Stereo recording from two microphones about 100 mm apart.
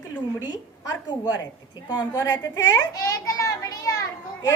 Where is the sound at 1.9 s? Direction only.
40° left (ahead or behind).